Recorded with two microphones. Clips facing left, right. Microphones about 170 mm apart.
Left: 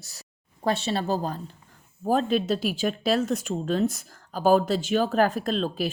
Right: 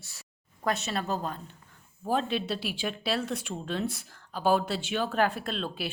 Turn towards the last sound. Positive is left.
turn(degrees=40)  # may be behind; listen again after turning